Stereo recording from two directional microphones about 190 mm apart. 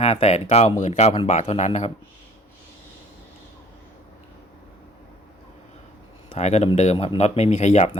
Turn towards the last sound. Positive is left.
turn(degrees=35)  # may be behind; listen again after turning